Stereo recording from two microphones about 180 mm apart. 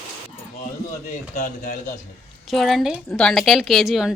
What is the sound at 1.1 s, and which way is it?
Speech, 45° left (ahead or behind).